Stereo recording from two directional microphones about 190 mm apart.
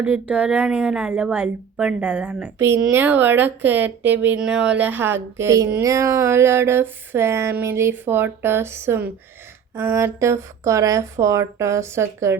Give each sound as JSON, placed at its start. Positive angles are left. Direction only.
{"t": 0.0, "sound": "speech", "side_deg": -5}